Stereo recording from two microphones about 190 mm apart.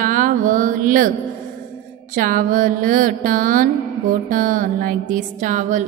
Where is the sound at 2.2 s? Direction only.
45° right (ahead or behind).